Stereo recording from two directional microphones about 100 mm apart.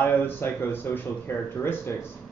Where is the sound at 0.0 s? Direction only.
20° left (ahead or behind).